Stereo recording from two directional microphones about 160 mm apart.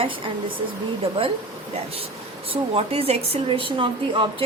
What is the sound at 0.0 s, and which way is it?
Speech, 30° right (ahead or behind).